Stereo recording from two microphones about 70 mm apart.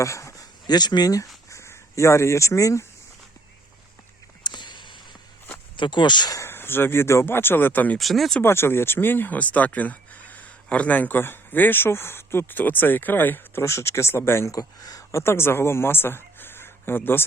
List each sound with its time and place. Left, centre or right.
0.0 s a sound: left
0.7 s speech: left
1.5 s speech: left
4.4 s a sound: left
5.9 s speech: left
6.5 s speech: left
7.9 s speech: centre
8.4 s speech: left
13.7 s speech: left
14.5 s speech: left
15.1 s speech: left